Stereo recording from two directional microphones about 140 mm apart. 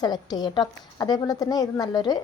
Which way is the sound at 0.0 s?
30° left (ahead or behind).